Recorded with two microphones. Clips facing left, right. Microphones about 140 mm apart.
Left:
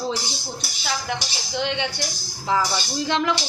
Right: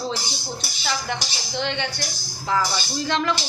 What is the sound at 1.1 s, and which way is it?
Speech, 5° left (ahead or behind).